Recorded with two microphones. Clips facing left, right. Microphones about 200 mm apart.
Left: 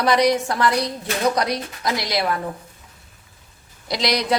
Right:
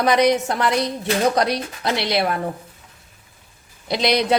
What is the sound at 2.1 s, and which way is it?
Speech, 25° right (ahead or behind).